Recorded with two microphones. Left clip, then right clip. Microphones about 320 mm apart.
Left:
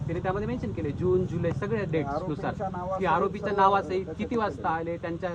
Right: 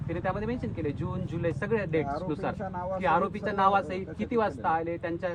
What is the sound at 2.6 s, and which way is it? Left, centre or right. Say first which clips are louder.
Speech: left 2 dB; right.